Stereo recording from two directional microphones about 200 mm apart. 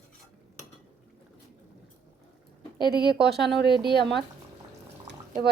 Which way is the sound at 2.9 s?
50° right (ahead or behind).